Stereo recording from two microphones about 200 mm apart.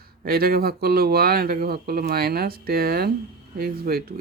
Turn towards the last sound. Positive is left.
turn(degrees=-50)  # may be behind; listen again after turning